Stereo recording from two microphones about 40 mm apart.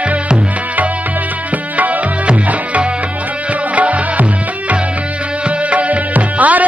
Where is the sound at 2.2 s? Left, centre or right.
Right.